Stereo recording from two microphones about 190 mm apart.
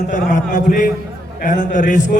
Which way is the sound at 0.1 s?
40° left (ahead or behind).